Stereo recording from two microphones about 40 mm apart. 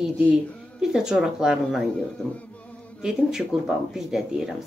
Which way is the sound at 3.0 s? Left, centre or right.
Centre.